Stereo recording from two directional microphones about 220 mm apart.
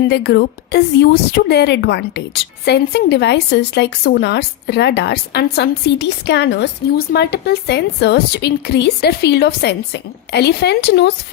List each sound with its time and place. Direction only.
0.1 s a woman's voice: 50° left (ahead or behind)